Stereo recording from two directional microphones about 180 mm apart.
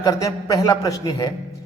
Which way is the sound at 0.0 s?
20° left (ahead or behind).